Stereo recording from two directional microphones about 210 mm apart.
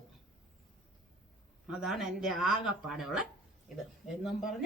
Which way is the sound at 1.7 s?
Centre (ahead or behind).